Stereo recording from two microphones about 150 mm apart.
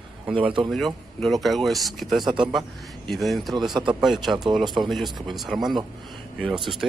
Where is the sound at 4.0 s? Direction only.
Centre (ahead or behind).